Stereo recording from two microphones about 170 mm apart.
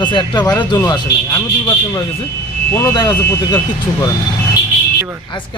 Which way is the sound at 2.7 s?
15° left (ahead or behind).